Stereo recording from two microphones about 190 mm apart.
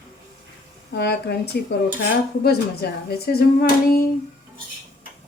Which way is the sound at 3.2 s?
55° left (ahead or behind).